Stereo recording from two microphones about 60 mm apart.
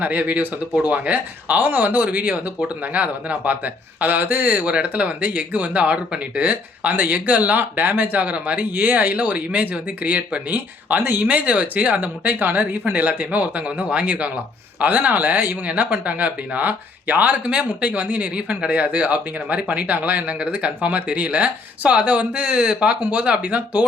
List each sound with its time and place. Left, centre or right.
0.0 s speech: right